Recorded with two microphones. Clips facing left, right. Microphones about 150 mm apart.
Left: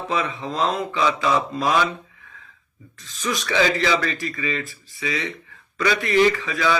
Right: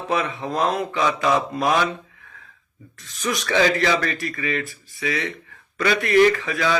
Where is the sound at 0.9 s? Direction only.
20° right (ahead or behind).